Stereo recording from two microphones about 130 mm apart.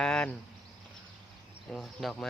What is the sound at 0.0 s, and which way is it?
Cricket, 5° left (ahead or behind).